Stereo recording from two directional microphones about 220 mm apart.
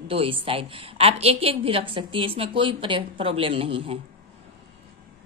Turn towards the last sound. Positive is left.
turn(degrees=-25)  # may be behind; listen again after turning